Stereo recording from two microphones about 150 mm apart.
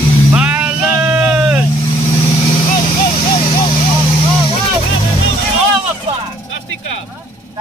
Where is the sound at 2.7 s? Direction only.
60° left (ahead or behind).